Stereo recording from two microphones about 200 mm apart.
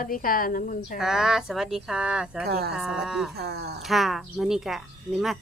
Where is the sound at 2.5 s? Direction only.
55° right (ahead or behind).